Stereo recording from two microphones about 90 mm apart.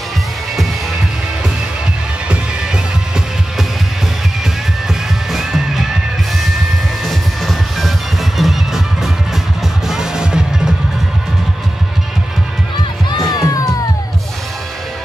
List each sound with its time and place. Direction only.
4.8 s music: 5° right (ahead or behind)
7.1 s music: centre (ahead or behind)
13.3 s music: 45° left (ahead or behind)